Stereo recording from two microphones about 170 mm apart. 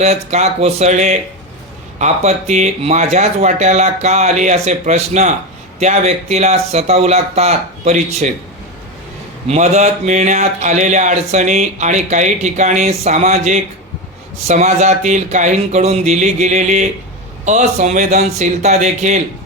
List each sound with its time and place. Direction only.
0.0 s speech: 40° right (ahead or behind)
9.5 s speech: 40° right (ahead or behind)